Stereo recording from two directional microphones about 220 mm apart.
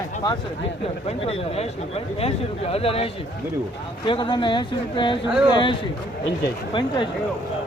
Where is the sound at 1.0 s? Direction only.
30° left (ahead or behind).